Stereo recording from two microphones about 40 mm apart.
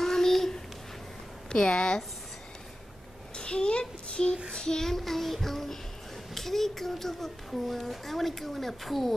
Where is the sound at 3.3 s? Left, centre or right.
Left.